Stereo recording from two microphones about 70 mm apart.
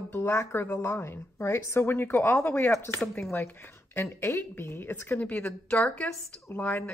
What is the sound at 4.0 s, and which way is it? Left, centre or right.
A woman's voice, left.